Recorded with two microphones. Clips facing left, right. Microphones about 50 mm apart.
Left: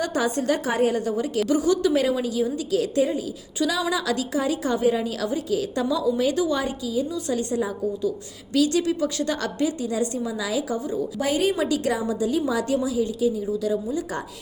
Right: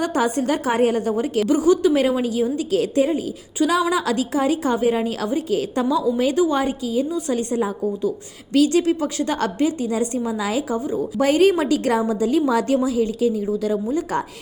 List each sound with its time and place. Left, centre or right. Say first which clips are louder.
0.0 s a woman's voice: right 3 dB; right
2.0 s a woman's voice: right 3 dB; right